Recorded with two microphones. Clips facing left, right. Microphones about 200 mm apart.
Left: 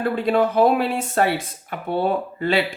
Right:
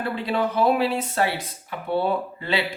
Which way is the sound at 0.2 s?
50° left (ahead or behind).